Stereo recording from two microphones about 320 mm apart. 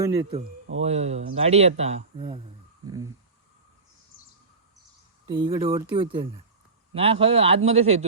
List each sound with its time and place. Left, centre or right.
0.0 s a man's voice: centre
5.3 s a man's voice: centre